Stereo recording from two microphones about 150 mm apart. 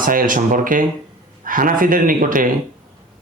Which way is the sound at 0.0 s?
65° right (ahead or behind).